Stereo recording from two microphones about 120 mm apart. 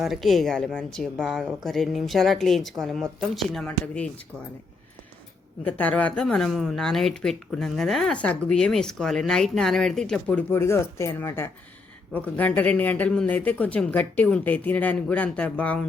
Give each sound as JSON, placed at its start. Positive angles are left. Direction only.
{"t": 0.0, "sound": "speech", "side_deg": 0}
{"t": 5.6, "sound": "speech", "side_deg": 15}
{"t": 10.5, "sound": "speech", "side_deg": 20}